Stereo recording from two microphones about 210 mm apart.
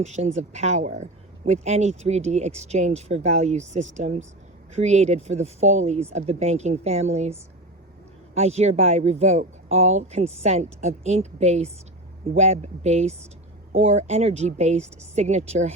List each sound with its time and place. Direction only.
0.0 s speech: 35° right (ahead or behind)
8.4 s speech: 30° right (ahead or behind)